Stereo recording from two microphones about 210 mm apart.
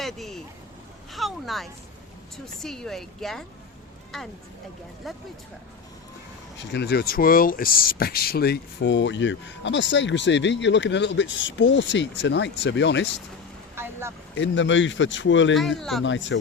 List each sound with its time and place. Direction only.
0.0 s a woman's voice: centre (ahead or behind)
6.7 s speech: 50° left (ahead or behind)
13.7 s vehicle: 10° right (ahead or behind)
14.3 s speech: 60° left (ahead or behind)
15.8 s a woman's voice: centre (ahead or behind)
16.0 s speech: 60° left (ahead or behind)